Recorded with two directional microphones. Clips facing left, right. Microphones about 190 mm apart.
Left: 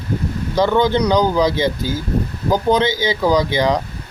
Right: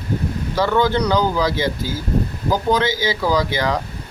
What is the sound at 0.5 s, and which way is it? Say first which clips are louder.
Speech: left 3 dB; 20° left (ahead or behind).